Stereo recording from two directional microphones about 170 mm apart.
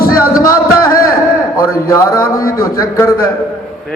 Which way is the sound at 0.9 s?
55° left (ahead or behind).